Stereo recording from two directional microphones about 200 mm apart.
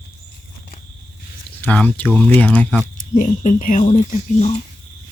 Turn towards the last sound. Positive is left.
turn(degrees=35)  # may be behind; listen again after turning